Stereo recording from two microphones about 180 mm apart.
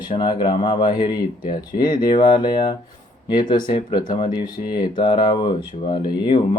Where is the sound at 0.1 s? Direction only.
25° left (ahead or behind).